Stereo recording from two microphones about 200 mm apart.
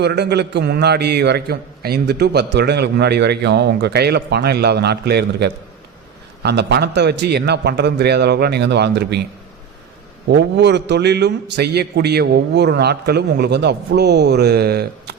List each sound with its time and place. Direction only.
0.0 s a man's voice: 55° right (ahead or behind)
10.2 s a man's voice: 55° right (ahead or behind)